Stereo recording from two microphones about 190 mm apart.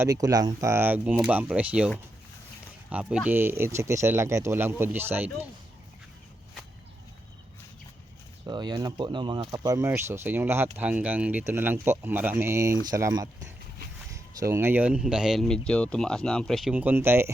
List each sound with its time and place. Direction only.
0.0 s speech: 20° right (ahead or behind)
2.9 s speech: 5° right (ahead or behind)
8.4 s speech: 20° right (ahead or behind)